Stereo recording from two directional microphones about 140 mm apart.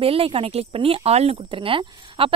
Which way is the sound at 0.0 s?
40° right (ahead or behind).